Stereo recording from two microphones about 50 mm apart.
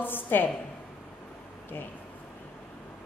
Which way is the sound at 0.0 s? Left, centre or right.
Left.